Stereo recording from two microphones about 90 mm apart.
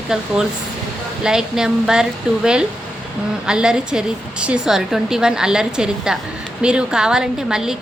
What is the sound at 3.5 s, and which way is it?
Speech, 10° right (ahead or behind).